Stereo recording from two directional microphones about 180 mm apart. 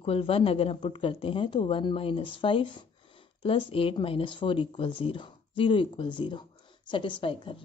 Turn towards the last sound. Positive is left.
turn(degrees=30)  # may be behind; listen again after turning